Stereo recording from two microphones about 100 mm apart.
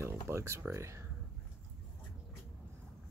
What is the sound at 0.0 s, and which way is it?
Speech, 25° right (ahead or behind).